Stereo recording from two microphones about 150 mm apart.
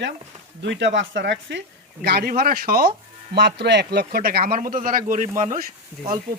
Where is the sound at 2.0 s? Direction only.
90° right; by 2.9 s 75° right (ahead or behind).